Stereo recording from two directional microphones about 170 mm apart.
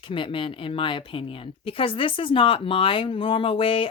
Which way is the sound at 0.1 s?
30° left (ahead or behind).